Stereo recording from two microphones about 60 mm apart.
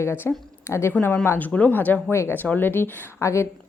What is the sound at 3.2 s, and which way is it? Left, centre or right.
Speech, left.